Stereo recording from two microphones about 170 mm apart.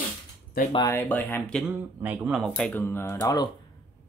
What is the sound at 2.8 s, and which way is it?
Speech, 15° left (ahead or behind).